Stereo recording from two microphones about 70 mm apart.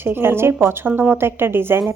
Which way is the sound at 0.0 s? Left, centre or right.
Right.